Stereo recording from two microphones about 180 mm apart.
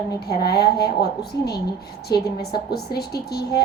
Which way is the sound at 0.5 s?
60° left (ahead or behind).